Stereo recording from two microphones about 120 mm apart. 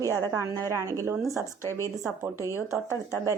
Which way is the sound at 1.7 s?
25° left (ahead or behind).